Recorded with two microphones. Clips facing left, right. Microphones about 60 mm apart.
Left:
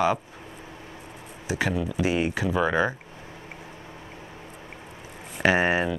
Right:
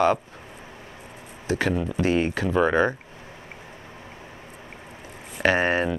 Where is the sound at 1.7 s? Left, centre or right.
Right.